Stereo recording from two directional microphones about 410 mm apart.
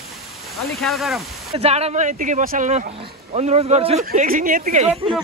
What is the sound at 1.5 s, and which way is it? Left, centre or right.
Speech, centre.